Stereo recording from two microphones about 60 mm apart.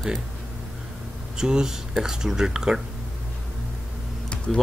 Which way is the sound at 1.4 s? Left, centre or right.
Centre.